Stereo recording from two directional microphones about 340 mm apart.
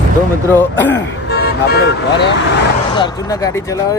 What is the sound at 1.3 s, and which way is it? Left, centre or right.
Speech, left.